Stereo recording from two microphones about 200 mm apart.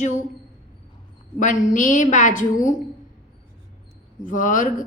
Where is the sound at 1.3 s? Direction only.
40° left (ahead or behind).